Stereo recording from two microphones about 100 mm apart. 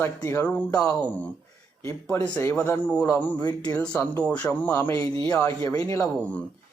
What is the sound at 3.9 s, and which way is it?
Speech, 30° left (ahead or behind).